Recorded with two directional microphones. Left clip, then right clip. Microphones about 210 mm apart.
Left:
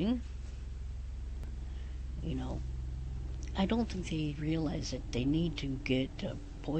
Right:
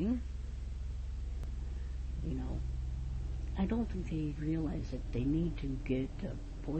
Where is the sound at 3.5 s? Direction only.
10° left (ahead or behind).